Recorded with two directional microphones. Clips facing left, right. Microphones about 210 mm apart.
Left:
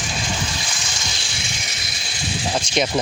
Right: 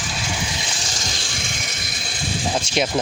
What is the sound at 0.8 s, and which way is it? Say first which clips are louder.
Vehicle: right 2 dB; 40° right (ahead or behind).